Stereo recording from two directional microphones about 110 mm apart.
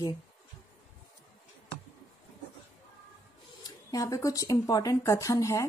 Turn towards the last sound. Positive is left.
turn(degrees=30)  # may be behind; listen again after turning